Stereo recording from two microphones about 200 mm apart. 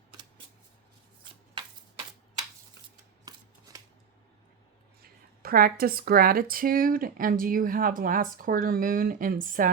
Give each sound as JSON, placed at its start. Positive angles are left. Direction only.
{"t": 3.3, "sound": "scissors", "side_deg": -20}
{"t": 5.4, "sound": "speech", "side_deg": -45}